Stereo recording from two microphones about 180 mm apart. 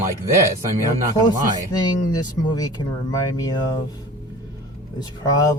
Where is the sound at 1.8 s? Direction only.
20° left (ahead or behind).